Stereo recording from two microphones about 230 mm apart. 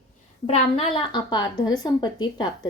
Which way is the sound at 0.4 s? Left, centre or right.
Left.